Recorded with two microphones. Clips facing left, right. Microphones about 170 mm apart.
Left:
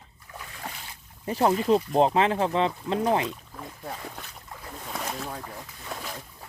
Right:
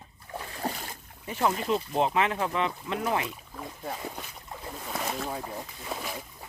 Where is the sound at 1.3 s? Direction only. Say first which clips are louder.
Left 5 dB; 35° left (ahead or behind).